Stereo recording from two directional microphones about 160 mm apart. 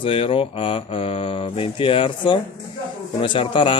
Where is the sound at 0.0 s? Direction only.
35° left (ahead or behind).